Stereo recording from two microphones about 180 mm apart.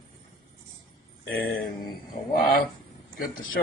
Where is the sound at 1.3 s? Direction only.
55° left (ahead or behind).